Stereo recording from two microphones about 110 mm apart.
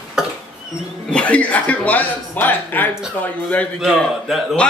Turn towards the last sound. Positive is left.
turn(degrees=0)  # may be behind; listen again after turning